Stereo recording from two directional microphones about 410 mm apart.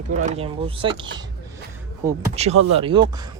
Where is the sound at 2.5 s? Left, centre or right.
Right.